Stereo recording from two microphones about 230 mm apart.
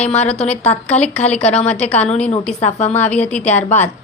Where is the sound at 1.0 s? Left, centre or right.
Left.